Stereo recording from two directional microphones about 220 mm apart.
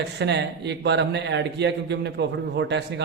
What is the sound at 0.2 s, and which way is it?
A man's voice, 50° right (ahead or behind).